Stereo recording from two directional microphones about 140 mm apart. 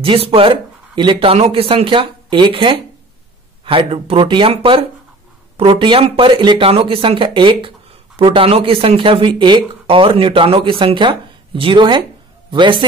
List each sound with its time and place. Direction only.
0.0 s a man's voice: 40° right (ahead or behind)